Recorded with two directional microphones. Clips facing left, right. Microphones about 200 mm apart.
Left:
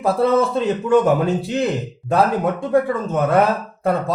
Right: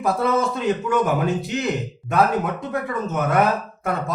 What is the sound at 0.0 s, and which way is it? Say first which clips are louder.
Speech: left 4 dB; 30° left (ahead or behind).